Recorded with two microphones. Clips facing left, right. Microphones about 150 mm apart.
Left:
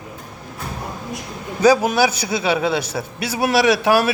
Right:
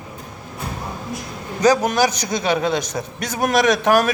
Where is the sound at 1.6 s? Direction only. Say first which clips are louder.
Left 1 dB; 10° left (ahead or behind).